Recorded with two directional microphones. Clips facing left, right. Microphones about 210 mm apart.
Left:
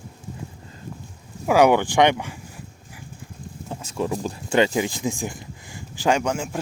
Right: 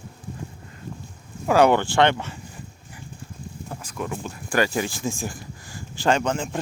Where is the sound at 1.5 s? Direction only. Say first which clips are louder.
Left 1 dB; 10° left (ahead or behind).